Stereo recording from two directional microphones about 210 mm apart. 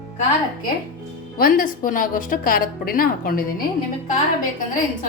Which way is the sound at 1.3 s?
45° left (ahead or behind).